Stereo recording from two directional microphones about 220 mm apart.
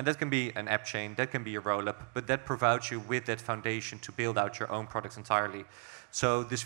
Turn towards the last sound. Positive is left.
turn(degrees=-10)  # may be behind; listen again after turning